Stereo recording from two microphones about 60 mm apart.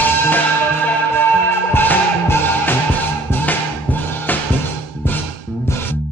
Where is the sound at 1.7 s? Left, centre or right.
Left.